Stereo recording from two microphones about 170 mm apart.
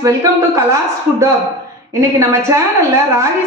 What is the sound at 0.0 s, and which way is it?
Speech, 20° right (ahead or behind).